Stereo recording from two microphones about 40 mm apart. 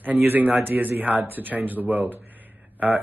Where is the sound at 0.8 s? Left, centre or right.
Right.